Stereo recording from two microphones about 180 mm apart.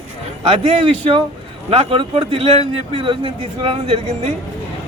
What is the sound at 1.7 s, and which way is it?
A man's voice, 30° right (ahead or behind).